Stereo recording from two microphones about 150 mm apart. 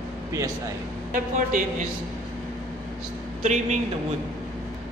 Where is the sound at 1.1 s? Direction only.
60° right (ahead or behind).